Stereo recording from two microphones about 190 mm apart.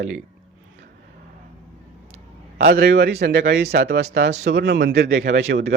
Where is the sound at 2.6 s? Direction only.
55° right (ahead or behind).